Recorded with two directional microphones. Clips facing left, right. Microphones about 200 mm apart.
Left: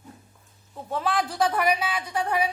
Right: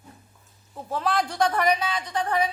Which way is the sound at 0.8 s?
Centre (ahead or behind).